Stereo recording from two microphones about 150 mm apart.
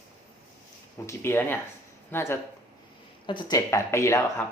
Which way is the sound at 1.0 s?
15° left (ahead or behind).